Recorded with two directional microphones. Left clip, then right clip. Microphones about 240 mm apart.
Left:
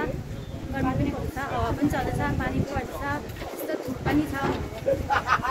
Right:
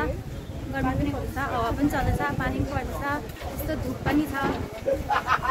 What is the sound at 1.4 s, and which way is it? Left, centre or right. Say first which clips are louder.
Speech: right 1 dB; centre.